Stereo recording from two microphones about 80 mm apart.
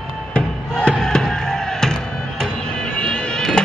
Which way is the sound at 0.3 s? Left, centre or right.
Centre.